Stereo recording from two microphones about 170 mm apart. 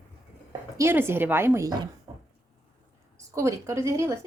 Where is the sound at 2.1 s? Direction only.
20° right (ahead or behind).